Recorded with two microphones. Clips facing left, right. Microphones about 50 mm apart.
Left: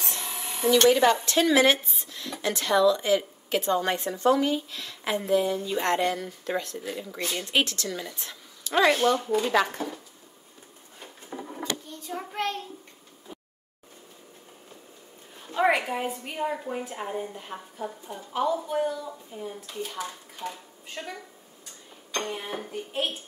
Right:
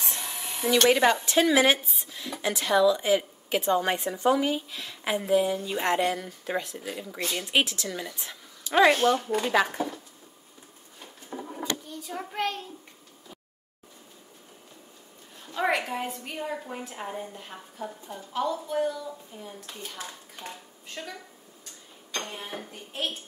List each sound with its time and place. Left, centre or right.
0.2 s a sound: centre
0.6 s a woman's voice: centre
8.3 s a sound: centre
9.4 s a woman's voice: centre
11.9 s a child's voice: centre
15.4 s a woman's voice: centre
19.7 s speech: left
20.9 s a woman's voice: centre